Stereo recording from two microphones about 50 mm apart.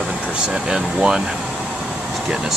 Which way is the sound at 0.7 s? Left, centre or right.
Centre.